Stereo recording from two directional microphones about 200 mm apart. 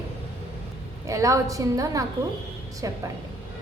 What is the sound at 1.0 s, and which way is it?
Speech, 15° right (ahead or behind).